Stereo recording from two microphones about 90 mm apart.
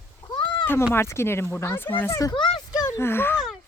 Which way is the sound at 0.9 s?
30° left (ahead or behind).